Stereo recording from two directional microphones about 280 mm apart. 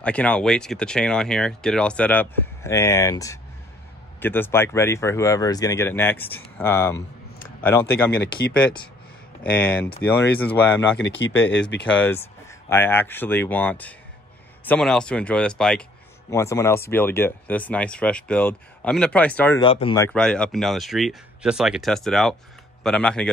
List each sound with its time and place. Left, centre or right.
0.0 s speech: centre
8.2 s speech: left
9.4 s speech: centre
11.0 s speech: left
11.8 s speech: centre
19.6 s speech: centre
20.1 s speech: centre